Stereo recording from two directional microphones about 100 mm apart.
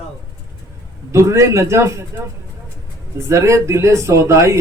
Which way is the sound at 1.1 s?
30° right (ahead or behind).